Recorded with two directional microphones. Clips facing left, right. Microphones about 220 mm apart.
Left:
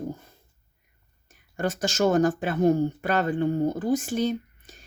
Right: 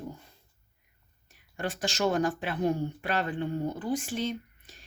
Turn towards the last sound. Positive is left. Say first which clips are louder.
# left 6 dB
turn(degrees=45)  # may be behind; listen again after turning